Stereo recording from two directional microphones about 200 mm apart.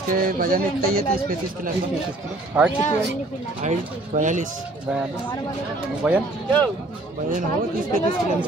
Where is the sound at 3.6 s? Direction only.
35° right (ahead or behind).